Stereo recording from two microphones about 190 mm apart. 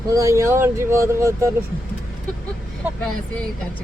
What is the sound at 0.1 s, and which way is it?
Speech, 15° right (ahead or behind).